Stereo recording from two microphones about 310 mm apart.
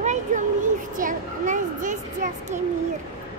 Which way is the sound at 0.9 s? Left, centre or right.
Right.